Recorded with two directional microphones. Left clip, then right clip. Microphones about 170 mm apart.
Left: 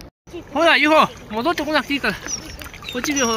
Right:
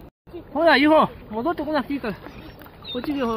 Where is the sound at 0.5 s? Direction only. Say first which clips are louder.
Left 2 dB; 5° right (ahead or behind).